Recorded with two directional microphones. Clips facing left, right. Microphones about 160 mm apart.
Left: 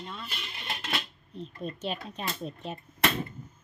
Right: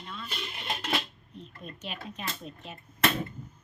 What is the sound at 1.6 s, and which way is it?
Speech, 30° left (ahead or behind).